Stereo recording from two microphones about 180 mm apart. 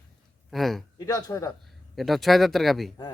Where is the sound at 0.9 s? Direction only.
20° left (ahead or behind).